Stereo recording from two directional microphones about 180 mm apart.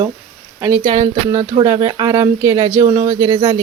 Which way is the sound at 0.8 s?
30° right (ahead or behind).